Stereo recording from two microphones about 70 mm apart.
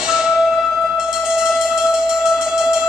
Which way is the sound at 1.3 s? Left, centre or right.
Centre.